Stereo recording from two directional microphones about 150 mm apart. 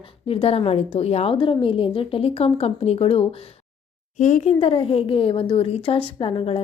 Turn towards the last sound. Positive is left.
turn(degrees=40)  # may be behind; listen again after turning